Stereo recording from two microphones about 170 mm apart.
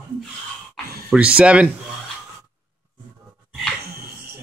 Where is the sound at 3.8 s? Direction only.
60° right (ahead or behind).